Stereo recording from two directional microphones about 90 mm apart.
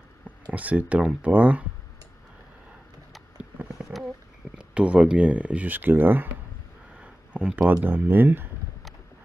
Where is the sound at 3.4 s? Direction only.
15° right (ahead or behind).